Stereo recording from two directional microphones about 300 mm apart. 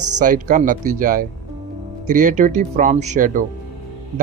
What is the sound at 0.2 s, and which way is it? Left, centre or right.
A man's voice, right.